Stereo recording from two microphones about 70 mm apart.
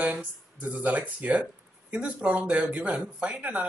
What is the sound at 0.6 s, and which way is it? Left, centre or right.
Speech, centre.